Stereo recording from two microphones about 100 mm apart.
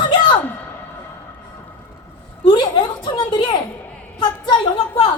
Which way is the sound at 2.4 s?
55° left (ahead or behind).